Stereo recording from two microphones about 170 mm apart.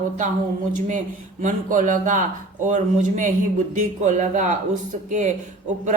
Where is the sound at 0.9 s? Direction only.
45° right (ahead or behind).